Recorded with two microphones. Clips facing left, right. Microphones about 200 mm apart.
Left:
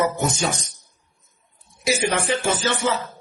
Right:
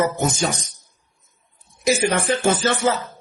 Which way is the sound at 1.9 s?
50° right (ahead or behind).